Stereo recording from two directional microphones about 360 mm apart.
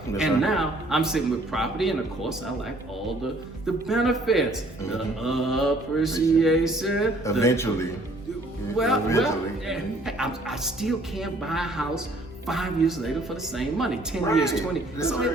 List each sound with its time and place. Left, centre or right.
0.1 s speech: centre
3.8 s speech: centre
8.8 s speech: centre